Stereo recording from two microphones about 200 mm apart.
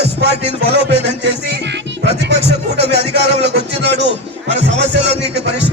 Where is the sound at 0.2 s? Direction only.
55° right (ahead or behind).